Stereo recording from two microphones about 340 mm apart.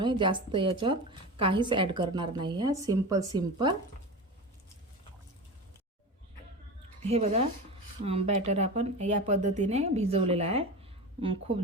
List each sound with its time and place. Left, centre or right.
0.0 s a woman's voice: centre
7.1 s a woman's voice: centre